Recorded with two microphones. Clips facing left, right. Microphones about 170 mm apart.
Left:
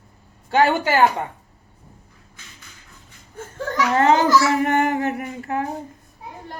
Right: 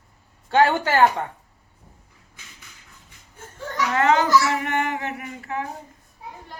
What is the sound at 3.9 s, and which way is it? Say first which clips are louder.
Speech: left 3 dB; 35° left (ahead or behind).